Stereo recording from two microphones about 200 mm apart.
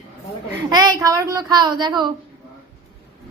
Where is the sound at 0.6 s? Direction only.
20° right (ahead or behind).